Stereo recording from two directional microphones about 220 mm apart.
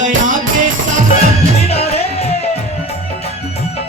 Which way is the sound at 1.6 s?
30° left (ahead or behind).